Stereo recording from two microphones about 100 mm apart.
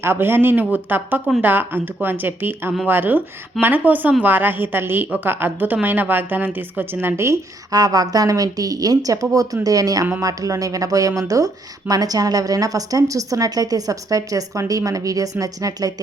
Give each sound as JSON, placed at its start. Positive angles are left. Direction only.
{"t": 0.0, "sound": "a woman's voice", "side_deg": -25}
{"t": 7.7, "sound": "speech", "side_deg": -40}